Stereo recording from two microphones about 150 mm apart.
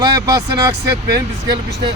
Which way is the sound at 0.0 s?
25° right (ahead or behind).